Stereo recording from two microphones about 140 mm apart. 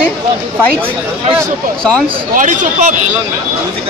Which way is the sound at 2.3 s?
60° right (ahead or behind).